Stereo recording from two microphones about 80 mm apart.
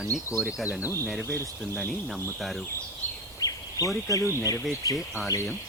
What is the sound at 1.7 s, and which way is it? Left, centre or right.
Speech, centre.